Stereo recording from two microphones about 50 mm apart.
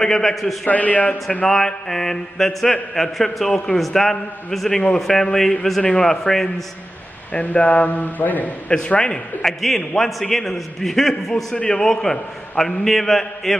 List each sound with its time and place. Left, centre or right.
0.0 s mantra: centre
0.7 s speech: left
1.5 s mantra: centre
3.5 s mantra: centre
7.3 s speech: left
8.6 s mantra: left; by 10.1 s centre
10.3 s a man's voice: centre
11.5 s a man's voice: left
11.8 s mantra: centre